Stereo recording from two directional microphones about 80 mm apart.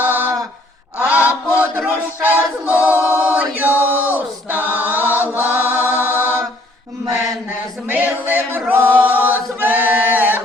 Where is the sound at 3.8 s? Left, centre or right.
Right.